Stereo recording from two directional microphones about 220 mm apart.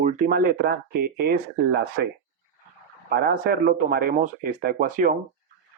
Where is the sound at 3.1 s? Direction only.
45° right (ahead or behind).